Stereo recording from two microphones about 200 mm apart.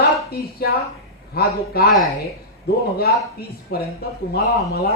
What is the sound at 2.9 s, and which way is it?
Speech, 50° left (ahead or behind).